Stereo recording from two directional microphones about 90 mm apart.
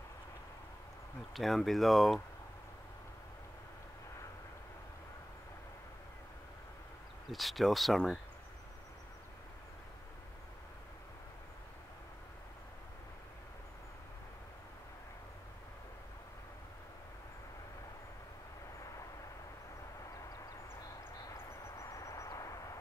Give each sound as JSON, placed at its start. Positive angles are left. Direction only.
{"t": 1.3, "sound": "speech", "side_deg": 0}
{"t": 7.2, "sound": "speech", "side_deg": 0}
{"t": 21.3, "sound": "vehicle", "side_deg": 35}